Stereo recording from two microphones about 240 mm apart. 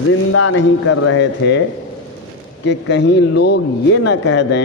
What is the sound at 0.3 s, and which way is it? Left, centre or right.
Speech, left.